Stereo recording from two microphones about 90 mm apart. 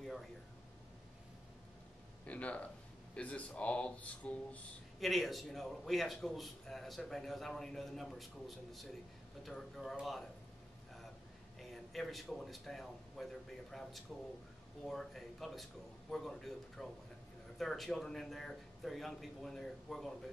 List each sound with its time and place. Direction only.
2.2 s speech: 15° left (ahead or behind)
5.0 s a man's voice: centre (ahead or behind)
11.7 s a man's voice: centre (ahead or behind)